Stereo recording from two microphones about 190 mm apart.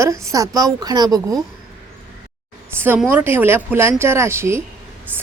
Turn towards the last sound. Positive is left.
turn(degrees=-15)  # may be behind; listen again after turning